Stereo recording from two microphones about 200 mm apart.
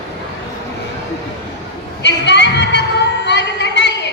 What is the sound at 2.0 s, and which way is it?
Music, 60° left (ahead or behind).